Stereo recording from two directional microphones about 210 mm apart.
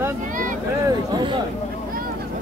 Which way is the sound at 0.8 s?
20° right (ahead or behind).